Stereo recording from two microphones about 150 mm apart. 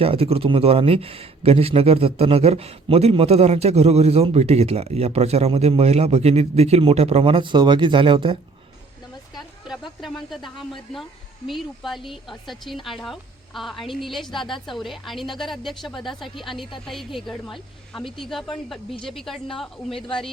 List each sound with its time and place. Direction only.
0.0 s speech: 40° right (ahead or behind)
10.0 s speech: centre (ahead or behind)